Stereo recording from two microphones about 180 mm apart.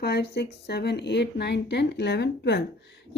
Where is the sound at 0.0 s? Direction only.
65° left (ahead or behind).